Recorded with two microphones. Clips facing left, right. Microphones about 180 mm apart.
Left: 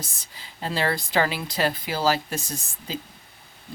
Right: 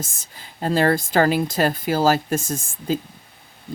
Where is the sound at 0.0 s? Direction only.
45° right (ahead or behind).